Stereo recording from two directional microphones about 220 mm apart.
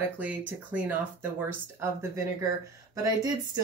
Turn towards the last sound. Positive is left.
turn(degrees=-15)  # may be behind; listen again after turning